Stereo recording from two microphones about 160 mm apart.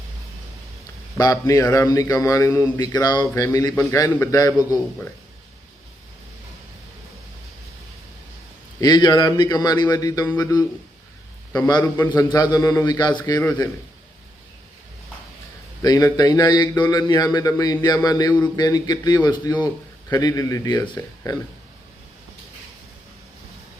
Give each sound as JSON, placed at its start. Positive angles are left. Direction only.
{"t": 1.2, "sound": "a man's voice", "side_deg": 20}
{"t": 8.8, "sound": "a man's voice", "side_deg": 25}
{"t": 15.8, "sound": "a man's voice", "side_deg": 25}